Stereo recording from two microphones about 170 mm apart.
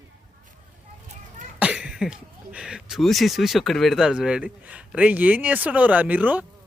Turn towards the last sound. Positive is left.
turn(degrees=-10)  # may be behind; listen again after turning